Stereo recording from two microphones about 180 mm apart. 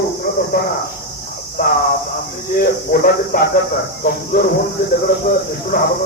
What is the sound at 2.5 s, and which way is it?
Speech, 55° left (ahead or behind).